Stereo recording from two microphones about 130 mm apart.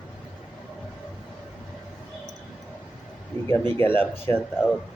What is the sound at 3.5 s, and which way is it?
Speech, 15° left (ahead or behind).